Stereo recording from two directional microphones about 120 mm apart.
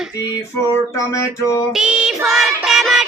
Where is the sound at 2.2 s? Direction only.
Centre (ahead or behind).